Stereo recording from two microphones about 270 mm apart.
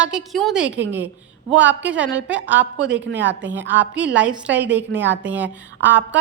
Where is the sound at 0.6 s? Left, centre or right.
Right.